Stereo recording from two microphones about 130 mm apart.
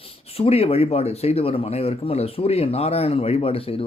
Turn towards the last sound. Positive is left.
turn(degrees=45)  # may be behind; listen again after turning